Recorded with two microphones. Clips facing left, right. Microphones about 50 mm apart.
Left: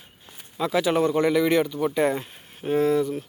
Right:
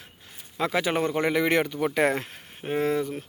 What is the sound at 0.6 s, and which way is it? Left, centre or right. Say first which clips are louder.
Speech: left 3 dB; right.